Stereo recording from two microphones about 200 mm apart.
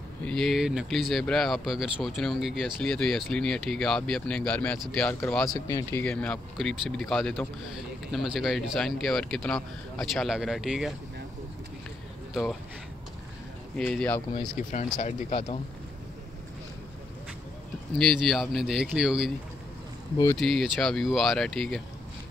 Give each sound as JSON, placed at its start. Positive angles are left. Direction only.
{"t": 0.2, "sound": "speech", "side_deg": 5}
{"t": 5.7, "sound": "speech", "side_deg": 15}
{"t": 13.7, "sound": "speech", "side_deg": 5}
{"t": 14.7, "sound": "speech", "side_deg": 35}
{"t": 17.9, "sound": "speech", "side_deg": 0}
{"t": 20.3, "sound": "speech", "side_deg": 0}